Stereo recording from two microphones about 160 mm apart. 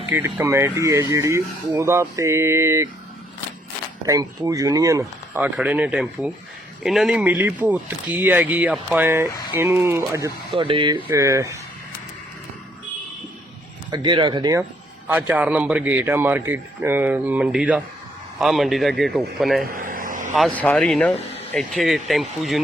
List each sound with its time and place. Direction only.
0.1 s speech: 15° right (ahead or behind)
4.0 s speech: 20° right (ahead or behind)
10.5 s speech: 35° right (ahead or behind)
11.1 s speech: 20° right (ahead or behind)
13.9 s speech: 30° right (ahead or behind)
15.3 s speech: 10° right (ahead or behind)
19.7 s vehicle: 55° right (ahead or behind)
20.3 s speech: 5° left (ahead or behind)